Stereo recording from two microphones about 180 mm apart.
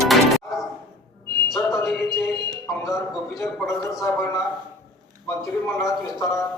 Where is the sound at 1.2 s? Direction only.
65° left (ahead or behind).